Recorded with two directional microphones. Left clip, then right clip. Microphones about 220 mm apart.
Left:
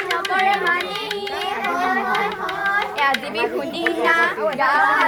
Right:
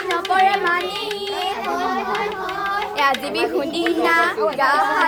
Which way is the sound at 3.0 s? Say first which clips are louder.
Right 1 dB; 55° right (ahead or behind).